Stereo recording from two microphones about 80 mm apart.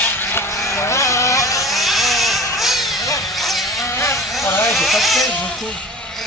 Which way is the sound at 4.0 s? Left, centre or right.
Left.